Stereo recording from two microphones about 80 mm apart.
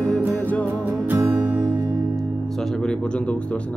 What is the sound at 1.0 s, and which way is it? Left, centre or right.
Music, right.